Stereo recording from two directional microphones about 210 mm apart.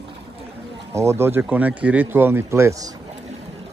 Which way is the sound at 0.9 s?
15° right (ahead or behind).